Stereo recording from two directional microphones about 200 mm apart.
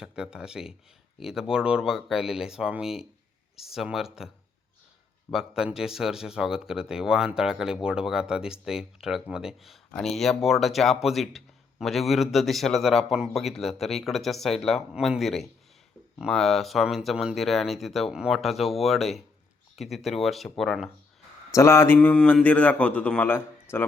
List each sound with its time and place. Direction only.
0.0 s speech: 5° right (ahead or behind)
5.3 s speech: centre (ahead or behind)
21.5 s a man's voice: 15° left (ahead or behind)